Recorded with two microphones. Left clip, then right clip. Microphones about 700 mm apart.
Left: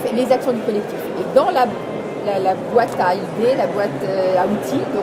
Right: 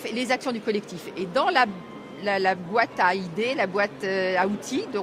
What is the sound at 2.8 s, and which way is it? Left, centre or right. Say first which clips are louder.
Speech: left 5 dB; right.